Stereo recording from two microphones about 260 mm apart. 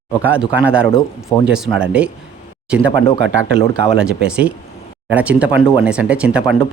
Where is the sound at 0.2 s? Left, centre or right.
Centre.